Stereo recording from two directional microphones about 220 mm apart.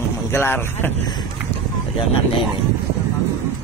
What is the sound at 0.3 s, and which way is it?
Speech, 10° left (ahead or behind).